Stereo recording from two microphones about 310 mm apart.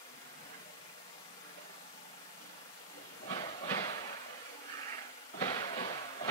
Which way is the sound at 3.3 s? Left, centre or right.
Centre.